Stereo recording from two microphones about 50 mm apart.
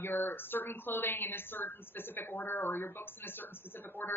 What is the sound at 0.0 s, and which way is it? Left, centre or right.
A woman's voice, left.